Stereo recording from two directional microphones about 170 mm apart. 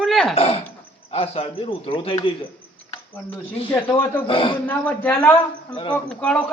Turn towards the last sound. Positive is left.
turn(degrees=5)  # may be behind; listen again after turning